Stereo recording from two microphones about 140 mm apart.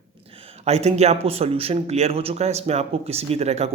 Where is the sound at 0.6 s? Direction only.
50° right (ahead or behind).